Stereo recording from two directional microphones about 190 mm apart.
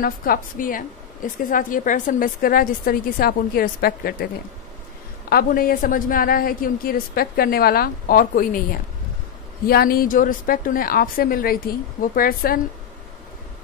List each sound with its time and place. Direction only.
0.0 s a woman's voice: 50° left (ahead or behind)
5.3 s a woman's voice: 50° left (ahead or behind)